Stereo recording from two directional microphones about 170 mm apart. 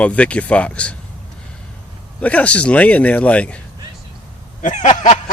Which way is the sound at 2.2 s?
10° left (ahead or behind).